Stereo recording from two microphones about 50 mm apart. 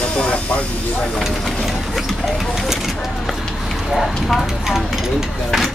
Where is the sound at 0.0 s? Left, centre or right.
Left.